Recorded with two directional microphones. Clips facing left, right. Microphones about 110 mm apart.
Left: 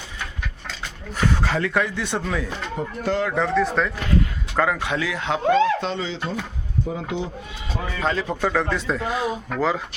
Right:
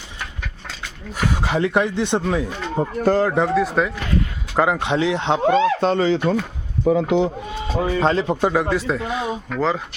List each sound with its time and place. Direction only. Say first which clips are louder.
1.4 s speech: right 3 dB; 20° right (ahead or behind)
3.0 s speech: right 6 dB; 40° right (ahead or behind)
3.3 s speech: right 2 dB; 20° right (ahead or behind)
4.5 s speech: right 4 dB; 20° right (ahead or behind)
5.5 s speech: right 1 dB; 45° right (ahead or behind)
6.8 s speech: right 13 dB; 70° right (ahead or behind)
7.9 s speech: right 5 dB; 30° right (ahead or behind)
8.7 s speech: right 2 dB; centre (ahead or behind)